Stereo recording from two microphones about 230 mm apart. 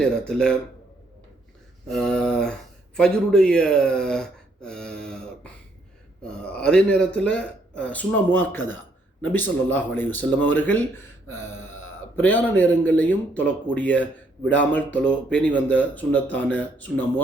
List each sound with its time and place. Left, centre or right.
0.0 s speech: centre
1.9 s speech: centre
11.5 s a sound: left
12.1 s speech: centre